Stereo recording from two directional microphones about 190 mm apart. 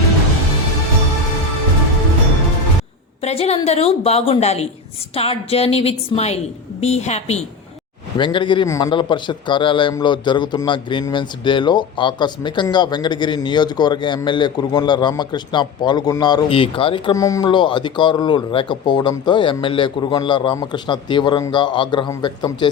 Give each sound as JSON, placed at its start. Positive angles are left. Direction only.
{"t": 3.2, "sound": "a woman's voice", "side_deg": 35}